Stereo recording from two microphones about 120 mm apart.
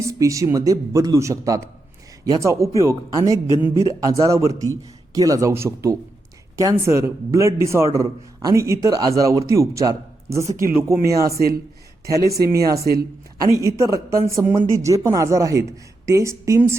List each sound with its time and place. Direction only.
0.0 s speech: 25° right (ahead or behind)